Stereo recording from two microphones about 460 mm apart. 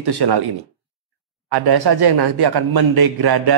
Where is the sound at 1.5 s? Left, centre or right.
Right.